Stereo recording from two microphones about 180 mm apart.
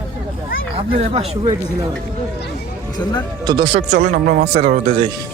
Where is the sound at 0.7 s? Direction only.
35° right (ahead or behind).